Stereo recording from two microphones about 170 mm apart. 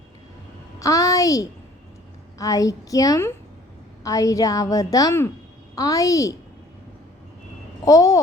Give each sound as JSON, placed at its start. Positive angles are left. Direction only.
{"t": 0.8, "sound": "a woman's voice", "side_deg": 20}
{"t": 7.9, "sound": "a woman's voice", "side_deg": 20}